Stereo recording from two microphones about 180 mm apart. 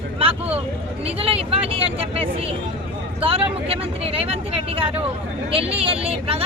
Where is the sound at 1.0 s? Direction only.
35° right (ahead or behind).